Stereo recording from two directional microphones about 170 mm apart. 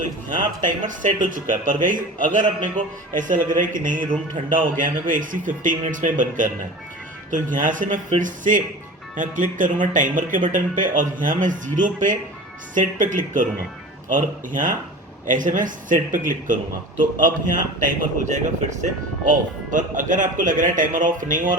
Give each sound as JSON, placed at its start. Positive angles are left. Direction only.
{"t": 0.3, "sound": "speech", "side_deg": -50}
{"t": 7.5, "sound": "speech", "side_deg": -50}